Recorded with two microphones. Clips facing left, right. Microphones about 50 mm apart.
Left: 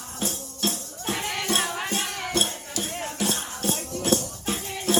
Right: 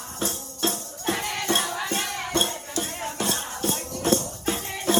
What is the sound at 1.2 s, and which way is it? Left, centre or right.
Music, left.